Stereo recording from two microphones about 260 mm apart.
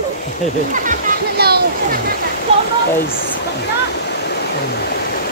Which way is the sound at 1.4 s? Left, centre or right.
Right.